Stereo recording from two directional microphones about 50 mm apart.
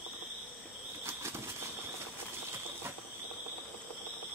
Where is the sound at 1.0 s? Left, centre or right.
Right.